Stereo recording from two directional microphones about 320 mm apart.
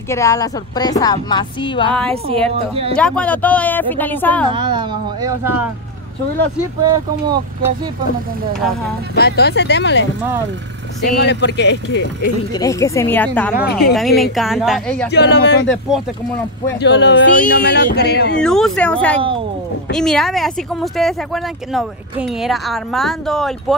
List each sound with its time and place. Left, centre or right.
0.1 s a woman's voice: centre
1.9 s speech: centre
2.2 s speech: centre
3.0 s speech: centre
4.5 s speech: centre
6.8 s speech: centre
9.1 s speech: left
11.1 s speech: left
12.5 s a woman's voice: centre
13.7 s speech: left
13.9 s speech: centre
15.0 s speech: left
16.8 s speech: left
18.4 s speech: centre